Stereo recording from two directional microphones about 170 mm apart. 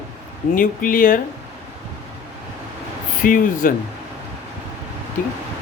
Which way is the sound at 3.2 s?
55° left (ahead or behind).